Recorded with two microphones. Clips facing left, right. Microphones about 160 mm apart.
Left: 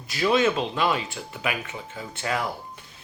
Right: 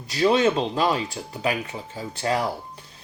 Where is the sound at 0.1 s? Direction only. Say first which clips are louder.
Right 2 dB; 35° right (ahead or behind).